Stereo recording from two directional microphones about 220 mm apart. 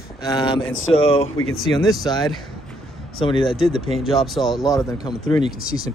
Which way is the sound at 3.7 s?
30° right (ahead or behind).